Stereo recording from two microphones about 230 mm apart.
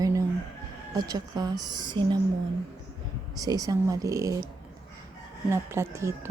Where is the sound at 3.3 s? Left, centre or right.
Centre.